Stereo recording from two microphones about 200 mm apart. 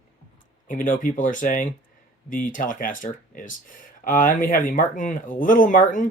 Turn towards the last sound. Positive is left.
turn(degrees=40)  # may be behind; listen again after turning